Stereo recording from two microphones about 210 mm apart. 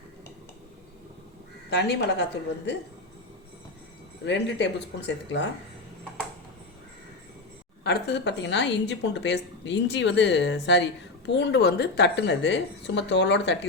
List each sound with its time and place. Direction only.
1.7 s a woman's voice: 50° left (ahead or behind)
4.3 s a woman's voice: 55° left (ahead or behind)
7.9 s a woman's voice: 55° left (ahead or behind)